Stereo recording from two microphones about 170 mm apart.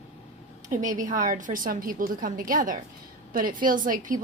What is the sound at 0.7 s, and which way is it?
Speech, 50° right (ahead or behind).